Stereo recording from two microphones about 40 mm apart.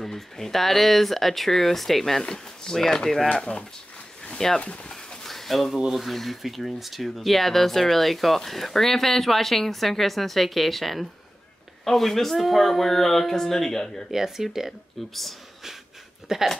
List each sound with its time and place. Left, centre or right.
0.0 s speech: centre
2.2 s speech: centre
3.3 s speech: left
4.2 s a sound: centre
4.6 s a sound: left
5.2 s a sound: centre
5.9 s speech: centre
14.1 s speech: centre
15.0 s speech: centre
16.3 s speech: centre